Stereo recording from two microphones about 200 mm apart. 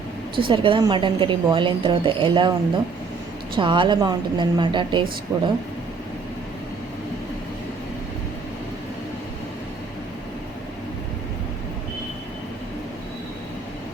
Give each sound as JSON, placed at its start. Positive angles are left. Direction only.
{"t": 0.3, "sound": "a woman's voice", "side_deg": -25}